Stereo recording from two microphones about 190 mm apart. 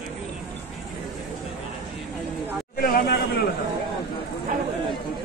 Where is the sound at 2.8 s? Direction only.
50° left (ahead or behind).